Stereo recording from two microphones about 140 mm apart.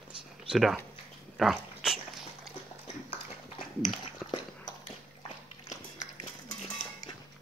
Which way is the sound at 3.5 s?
35° left (ahead or behind).